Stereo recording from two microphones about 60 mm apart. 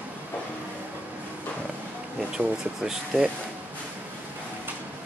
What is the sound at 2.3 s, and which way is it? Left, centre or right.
Speech, centre.